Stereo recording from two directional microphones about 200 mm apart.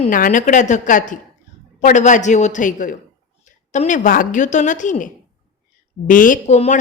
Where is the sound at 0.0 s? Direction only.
40° left (ahead or behind).